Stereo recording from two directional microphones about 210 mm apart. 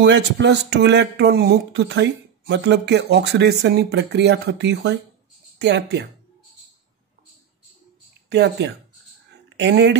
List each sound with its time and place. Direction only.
0.0 s speech: 60° right (ahead or behind)
8.3 s speech: 55° right (ahead or behind)